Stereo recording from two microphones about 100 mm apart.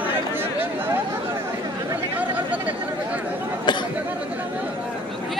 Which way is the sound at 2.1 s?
15° right (ahead or behind).